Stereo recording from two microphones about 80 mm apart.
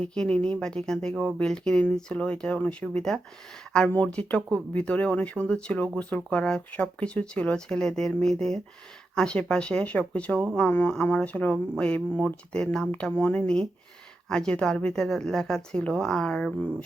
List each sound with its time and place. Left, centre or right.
0.1 s speech: centre
3.8 s speech: left
10.7 s speech: left; by 12.9 s centre
12.9 s speech: centre